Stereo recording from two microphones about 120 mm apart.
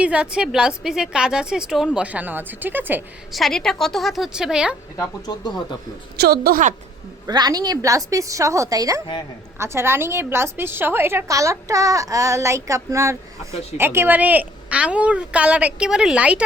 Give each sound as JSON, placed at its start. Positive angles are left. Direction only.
{"t": 0.0, "sound": "a woman's voice", "side_deg": -10}
{"t": 3.3, "sound": "a woman's voice", "side_deg": 0}
{"t": 4.9, "sound": "speech", "side_deg": 35}
{"t": 7.3, "sound": "a woman's voice", "side_deg": -35}